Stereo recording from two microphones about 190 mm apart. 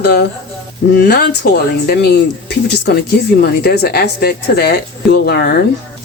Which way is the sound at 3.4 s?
55° left (ahead or behind).